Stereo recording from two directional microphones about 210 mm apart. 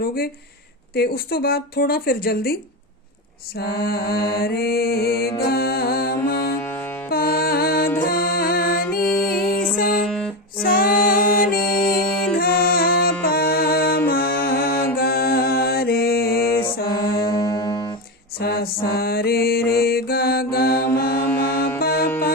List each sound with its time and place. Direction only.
0.0 s music: 45° left (ahead or behind)
3.6 s music: 50° left (ahead or behind)
6.6 s music: 10° left (ahead or behind)
7.1 s music: 45° left (ahead or behind)
10.1 s music: centre (ahead or behind)
10.6 s music: 40° left (ahead or behind)
17.2 s music: 20° left (ahead or behind)
18.3 s mantra: 45° left (ahead or behind)
21.2 s music: 10° left (ahead or behind)
21.8 s music: 45° left (ahead or behind)